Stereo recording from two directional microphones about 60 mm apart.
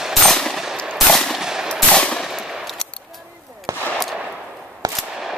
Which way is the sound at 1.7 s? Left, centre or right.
Centre.